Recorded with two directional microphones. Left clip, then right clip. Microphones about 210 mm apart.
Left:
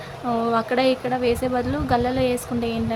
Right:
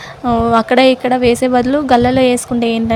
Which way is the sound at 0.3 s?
25° right (ahead or behind).